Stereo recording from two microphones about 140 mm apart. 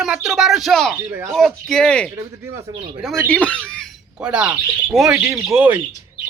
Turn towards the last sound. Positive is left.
turn(degrees=-10)  # may be behind; listen again after turning